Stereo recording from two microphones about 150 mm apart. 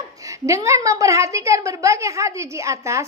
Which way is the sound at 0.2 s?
20° right (ahead or behind).